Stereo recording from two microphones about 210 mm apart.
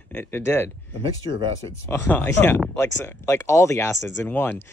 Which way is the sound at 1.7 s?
10° left (ahead or behind).